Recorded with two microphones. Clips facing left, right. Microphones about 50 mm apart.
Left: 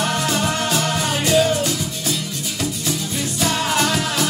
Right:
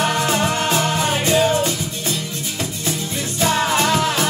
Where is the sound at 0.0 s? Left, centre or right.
Right.